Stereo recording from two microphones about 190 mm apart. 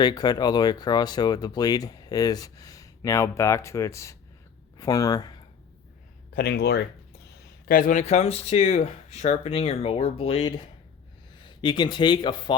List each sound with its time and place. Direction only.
0.0 s speech: 20° left (ahead or behind)
6.3 s speech: 55° left (ahead or behind)
7.7 s speech: 45° left (ahead or behind); by 12.5 s 25° left (ahead or behind)